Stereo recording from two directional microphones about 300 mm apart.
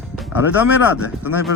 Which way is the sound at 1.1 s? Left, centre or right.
Centre.